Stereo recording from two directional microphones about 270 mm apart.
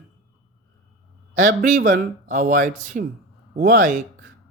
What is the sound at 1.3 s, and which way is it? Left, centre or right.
A man's voice, right.